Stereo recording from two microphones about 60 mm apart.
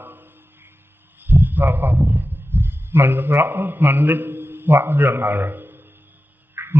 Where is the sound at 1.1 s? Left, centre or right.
Right.